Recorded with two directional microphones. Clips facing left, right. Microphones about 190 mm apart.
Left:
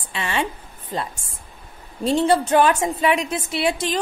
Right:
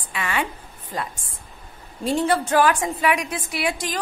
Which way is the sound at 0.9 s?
25° left (ahead or behind).